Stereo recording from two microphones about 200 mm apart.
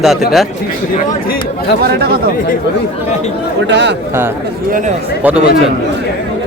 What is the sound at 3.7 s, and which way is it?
Speech, 60° right (ahead or behind).